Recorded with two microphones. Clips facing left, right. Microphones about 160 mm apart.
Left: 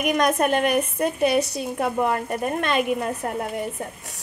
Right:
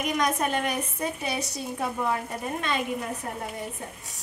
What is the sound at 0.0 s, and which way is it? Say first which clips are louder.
Speech: left 6 dB; 60° left (ahead or behind).